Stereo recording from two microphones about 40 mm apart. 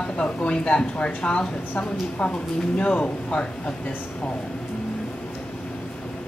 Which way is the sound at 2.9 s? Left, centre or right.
Left.